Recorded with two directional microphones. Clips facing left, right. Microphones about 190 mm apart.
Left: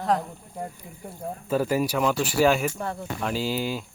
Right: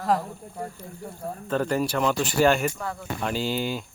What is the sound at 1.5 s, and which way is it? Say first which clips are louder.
Speech: left 1 dB; 5° left (ahead or behind).